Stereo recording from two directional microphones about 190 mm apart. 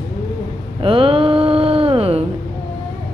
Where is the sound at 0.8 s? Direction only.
30° right (ahead or behind).